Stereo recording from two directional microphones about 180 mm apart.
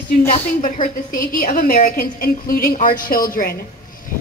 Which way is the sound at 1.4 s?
50° left (ahead or behind).